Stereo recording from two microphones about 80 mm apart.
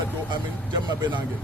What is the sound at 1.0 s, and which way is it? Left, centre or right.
Speech, right.